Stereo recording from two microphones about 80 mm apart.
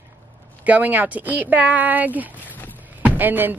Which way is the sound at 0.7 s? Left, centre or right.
Right.